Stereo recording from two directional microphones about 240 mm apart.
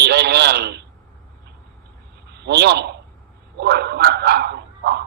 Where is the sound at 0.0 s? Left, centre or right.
Right.